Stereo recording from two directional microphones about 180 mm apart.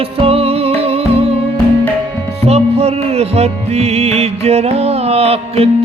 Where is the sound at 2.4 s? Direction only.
35° right (ahead or behind).